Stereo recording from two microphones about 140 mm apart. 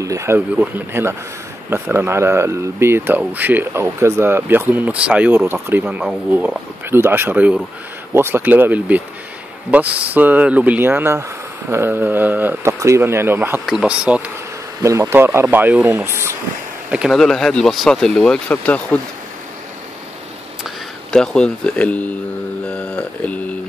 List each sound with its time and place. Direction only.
0.0 s speech: 20° right (ahead or behind)
13.7 s speech: 5° right (ahead or behind)
14.8 s speech: 20° right (ahead or behind)
16.9 s speech: 5° right (ahead or behind); by 18.9 s 10° left (ahead or behind)
21.1 s speech: 5° left (ahead or behind)